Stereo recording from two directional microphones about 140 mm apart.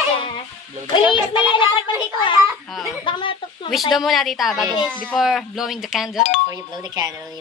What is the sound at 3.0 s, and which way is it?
Speech, 35° left (ahead or behind).